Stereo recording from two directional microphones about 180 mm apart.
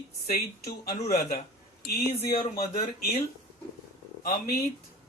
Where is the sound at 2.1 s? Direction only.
35° left (ahead or behind).